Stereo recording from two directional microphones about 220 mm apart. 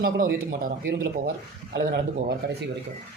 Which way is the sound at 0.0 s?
40° right (ahead or behind).